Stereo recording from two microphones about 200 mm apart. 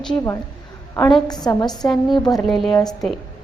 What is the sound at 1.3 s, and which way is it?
Speech, 20° left (ahead or behind).